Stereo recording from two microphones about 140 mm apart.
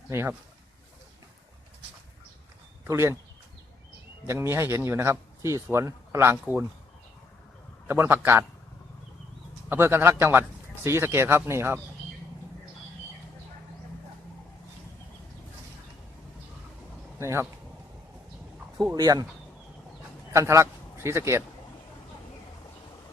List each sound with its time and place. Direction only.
0.1 s speech: 20° right (ahead or behind)
2.8 s speech: 20° right (ahead or behind)
4.3 s speech: 20° right (ahead or behind)
7.9 s speech: 15° right (ahead or behind)
9.6 s speech: 15° right (ahead or behind)
17.2 s speech: 20° right (ahead or behind)
18.9 s speech: 25° right (ahead or behind)
20.3 s a man's voice: 20° right (ahead or behind)